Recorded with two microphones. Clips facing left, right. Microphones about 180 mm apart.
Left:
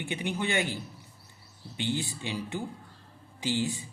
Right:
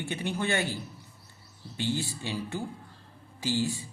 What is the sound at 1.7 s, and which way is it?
Speech, 20° left (ahead or behind).